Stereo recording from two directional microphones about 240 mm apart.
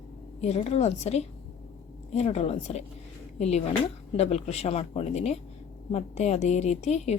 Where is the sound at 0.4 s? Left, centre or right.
Left.